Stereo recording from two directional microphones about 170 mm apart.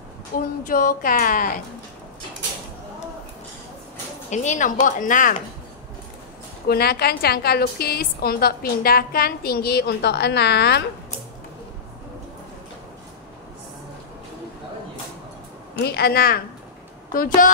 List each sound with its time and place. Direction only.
0.3 s a woman's voice: 55° left (ahead or behind)
4.3 s speech: 45° left (ahead or behind)
6.7 s a woman's voice: 65° left (ahead or behind)
15.8 s a woman's voice: 70° left (ahead or behind)